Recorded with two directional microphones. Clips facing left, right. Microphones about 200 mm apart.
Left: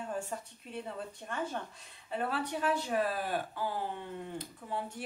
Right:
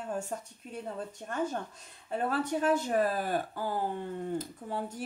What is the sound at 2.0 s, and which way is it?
Speech, 45° right (ahead or behind).